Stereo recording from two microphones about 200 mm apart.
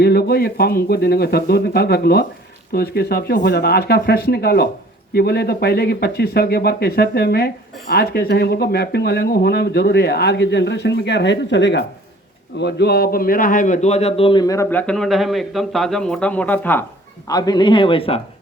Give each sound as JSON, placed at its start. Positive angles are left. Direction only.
{"t": 0.0, "sound": "a man's voice", "side_deg": 50}